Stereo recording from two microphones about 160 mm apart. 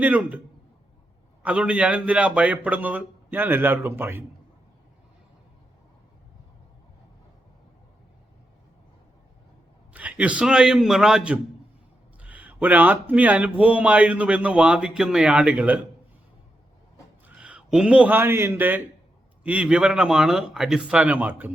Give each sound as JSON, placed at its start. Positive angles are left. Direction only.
{"t": 0.0, "sound": "speech", "side_deg": -10}
{"t": 9.9, "sound": "speech", "side_deg": -10}
{"t": 17.2, "sound": "a man's voice", "side_deg": -10}